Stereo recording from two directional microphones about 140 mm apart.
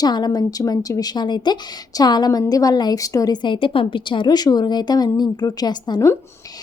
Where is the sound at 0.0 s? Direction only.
30° left (ahead or behind).